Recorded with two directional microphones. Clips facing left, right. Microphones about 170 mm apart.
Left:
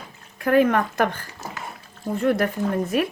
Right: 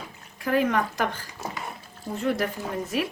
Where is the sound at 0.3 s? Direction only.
55° left (ahead or behind).